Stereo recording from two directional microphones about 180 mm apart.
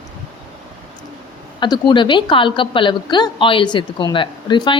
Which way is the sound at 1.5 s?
25° left (ahead or behind).